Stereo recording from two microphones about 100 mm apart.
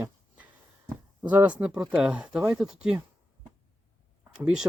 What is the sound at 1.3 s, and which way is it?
Speech, 15° right (ahead or behind).